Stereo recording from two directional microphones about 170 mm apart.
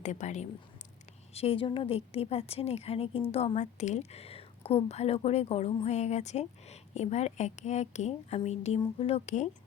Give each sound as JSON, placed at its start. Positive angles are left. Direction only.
{"t": 0.0, "sound": "a woman's voice", "side_deg": 45}